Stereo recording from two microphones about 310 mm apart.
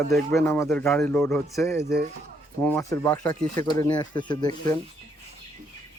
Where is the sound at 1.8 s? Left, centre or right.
Right.